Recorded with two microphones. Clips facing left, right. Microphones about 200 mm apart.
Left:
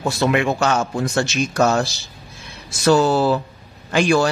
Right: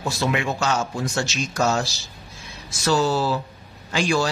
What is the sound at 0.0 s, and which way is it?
Speech, 55° left (ahead or behind).